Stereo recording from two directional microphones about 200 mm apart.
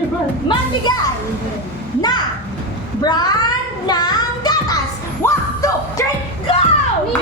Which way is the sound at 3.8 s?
20° left (ahead or behind).